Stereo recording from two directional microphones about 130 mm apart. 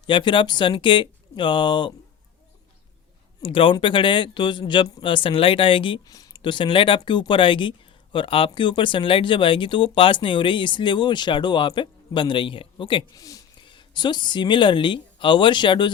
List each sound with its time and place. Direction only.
0.1 s speech: 40° left (ahead or behind)
3.4 s speech: 40° left (ahead or behind)
6.1 s speech: 30° left (ahead or behind)
13.1 s speech: 25° left (ahead or behind)